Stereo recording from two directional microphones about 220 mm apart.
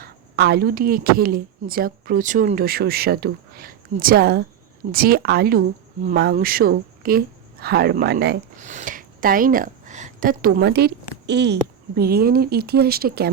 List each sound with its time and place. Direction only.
0.0 s speech: 50° right (ahead or behind)
8.6 s speech: 35° right (ahead or behind)